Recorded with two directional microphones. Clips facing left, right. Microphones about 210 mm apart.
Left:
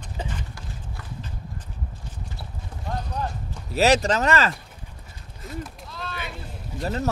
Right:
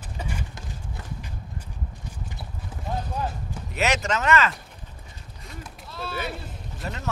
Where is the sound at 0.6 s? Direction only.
20° right (ahead or behind).